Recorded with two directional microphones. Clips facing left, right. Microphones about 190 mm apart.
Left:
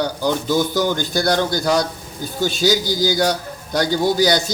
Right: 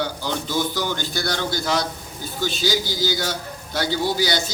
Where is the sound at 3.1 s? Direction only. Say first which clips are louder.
Left 7 dB; 40° left (ahead or behind).